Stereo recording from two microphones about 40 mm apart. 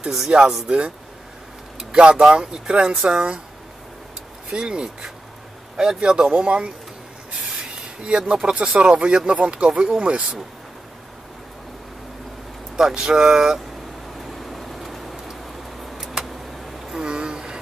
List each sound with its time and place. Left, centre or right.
0.3 s speech: right
4.5 s speech: right
7.6 s rub: centre
8.6 s speech: right
12.7 s speech: centre
14.2 s vehicle: centre
16.3 s a sound: centre
17.0 s a sound: centre